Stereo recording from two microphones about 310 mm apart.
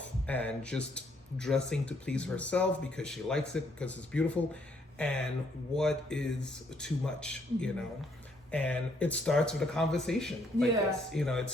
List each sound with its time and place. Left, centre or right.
0.0 s speech: centre